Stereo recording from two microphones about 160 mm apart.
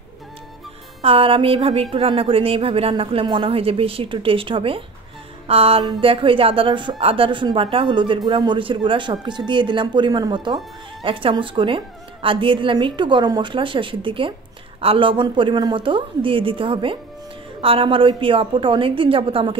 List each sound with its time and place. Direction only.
1.0 s speech: 35° right (ahead or behind)